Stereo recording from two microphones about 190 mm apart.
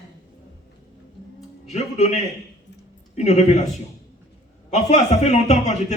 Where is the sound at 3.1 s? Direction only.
35° left (ahead or behind).